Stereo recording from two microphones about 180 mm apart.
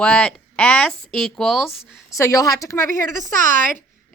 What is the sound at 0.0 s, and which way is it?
Speech, 5° left (ahead or behind).